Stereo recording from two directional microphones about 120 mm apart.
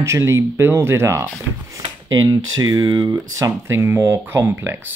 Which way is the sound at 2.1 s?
30° right (ahead or behind).